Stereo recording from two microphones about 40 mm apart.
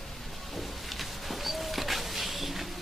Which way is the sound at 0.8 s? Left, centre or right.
Centre.